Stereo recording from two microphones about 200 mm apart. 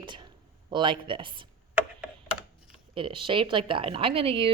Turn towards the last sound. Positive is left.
turn(degrees=-25)  # may be behind; listen again after turning